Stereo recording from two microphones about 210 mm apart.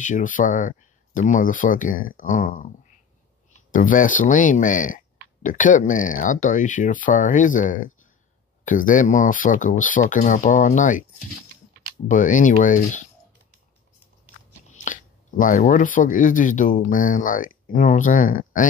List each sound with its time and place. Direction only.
0.0 s speech: 40° left (ahead or behind)
3.7 s speech: 40° left (ahead or behind)
12.1 s speech: 40° left (ahead or behind)
14.7 s speech: 40° left (ahead or behind)